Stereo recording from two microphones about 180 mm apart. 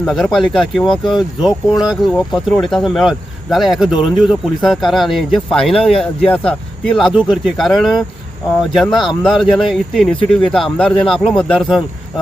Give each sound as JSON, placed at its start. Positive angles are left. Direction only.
{"t": 0.0, "sound": "speech", "side_deg": 0}